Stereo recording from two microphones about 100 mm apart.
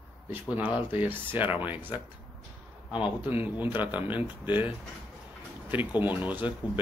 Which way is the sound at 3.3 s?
20° right (ahead or behind).